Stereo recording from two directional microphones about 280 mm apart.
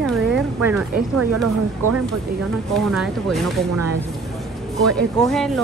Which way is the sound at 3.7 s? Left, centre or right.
Right.